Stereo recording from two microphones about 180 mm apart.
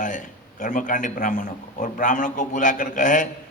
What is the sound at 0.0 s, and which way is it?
A man's voice, 45° left (ahead or behind).